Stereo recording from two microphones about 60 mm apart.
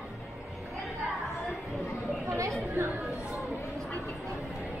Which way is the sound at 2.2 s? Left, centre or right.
Right.